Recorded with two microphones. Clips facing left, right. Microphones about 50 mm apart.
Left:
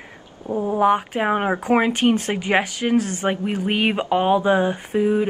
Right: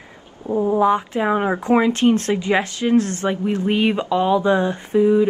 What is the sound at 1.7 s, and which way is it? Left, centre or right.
Speech, left.